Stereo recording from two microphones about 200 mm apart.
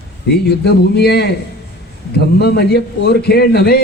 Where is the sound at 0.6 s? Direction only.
55° left (ahead or behind).